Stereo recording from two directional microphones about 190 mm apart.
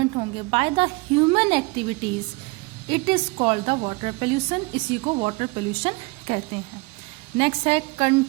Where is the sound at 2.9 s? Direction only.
30° right (ahead or behind).